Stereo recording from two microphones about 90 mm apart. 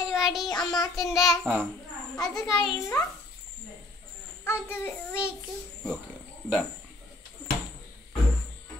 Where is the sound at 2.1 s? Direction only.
40° left (ahead or behind).